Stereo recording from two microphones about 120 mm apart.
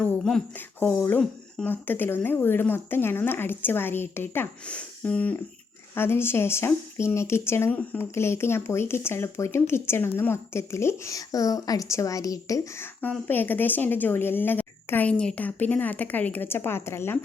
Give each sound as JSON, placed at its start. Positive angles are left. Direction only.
{"t": 0.0, "sound": "speech", "side_deg": 5}
{"t": 1.7, "sound": "speech", "side_deg": 15}
{"t": 13.0, "sound": "speech", "side_deg": 15}